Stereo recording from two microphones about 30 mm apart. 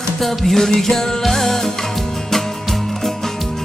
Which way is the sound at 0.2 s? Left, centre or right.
Centre.